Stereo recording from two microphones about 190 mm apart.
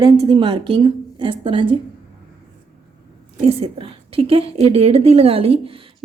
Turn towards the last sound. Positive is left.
turn(degrees=-30)  # may be behind; listen again after turning